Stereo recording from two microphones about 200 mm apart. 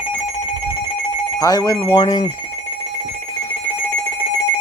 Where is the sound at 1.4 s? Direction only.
20° left (ahead or behind).